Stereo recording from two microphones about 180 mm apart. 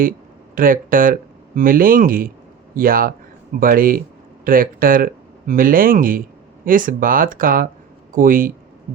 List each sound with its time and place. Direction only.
0.5 s speech: 50° right (ahead or behind)